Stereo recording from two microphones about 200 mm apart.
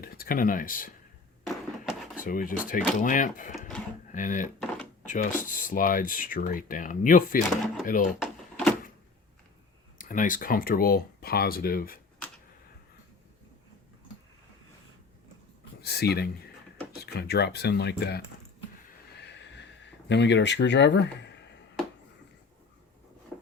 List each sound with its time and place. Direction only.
0.0 s speech: 45° left (ahead or behind)
1.5 s a sound: 5° right (ahead or behind)
2.2 s speech: 45° left (ahead or behind)
8.2 s door: centre (ahead or behind)
10.0 s speech: 40° left (ahead or behind)
15.8 s a sound: 55° left (ahead or behind)
16.9 s speech: 55° left (ahead or behind)
19.1 s a sound: 60° left (ahead or behind)
20.1 s speech: 60° left (ahead or behind)